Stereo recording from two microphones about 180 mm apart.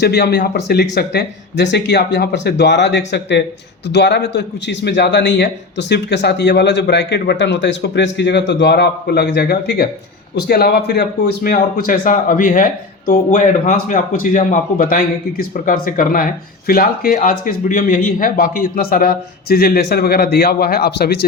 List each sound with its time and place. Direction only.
0.0 s a man's voice: 65° left (ahead or behind)